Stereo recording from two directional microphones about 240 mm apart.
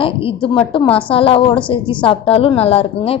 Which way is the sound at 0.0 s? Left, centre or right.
Left.